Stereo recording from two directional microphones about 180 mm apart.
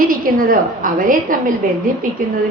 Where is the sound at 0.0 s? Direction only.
50° right (ahead or behind).